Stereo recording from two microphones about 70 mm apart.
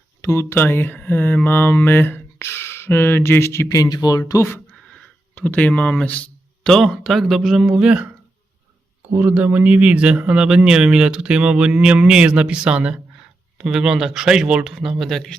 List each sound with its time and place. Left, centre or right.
0.2 s speech: left
3.7 s speech: left
5.3 s speech: left
6.7 s speech: centre
9.1 s speech: right; by 15.4 s centre